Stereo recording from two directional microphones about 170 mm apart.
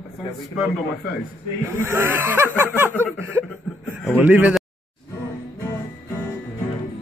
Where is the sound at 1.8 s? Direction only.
15° right (ahead or behind).